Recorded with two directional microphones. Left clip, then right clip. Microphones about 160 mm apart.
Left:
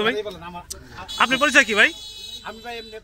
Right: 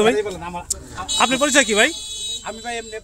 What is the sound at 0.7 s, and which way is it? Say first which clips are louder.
Speech: right 8 dB; 20° right (ahead or behind).